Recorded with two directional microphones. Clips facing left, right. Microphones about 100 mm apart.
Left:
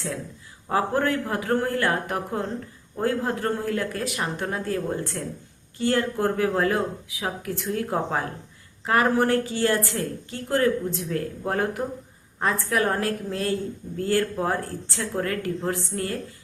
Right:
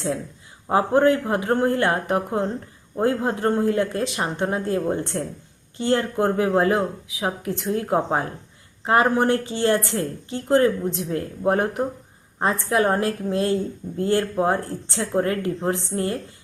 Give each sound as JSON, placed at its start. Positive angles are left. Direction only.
{"t": 0.7, "sound": "a woman's voice", "side_deg": -20}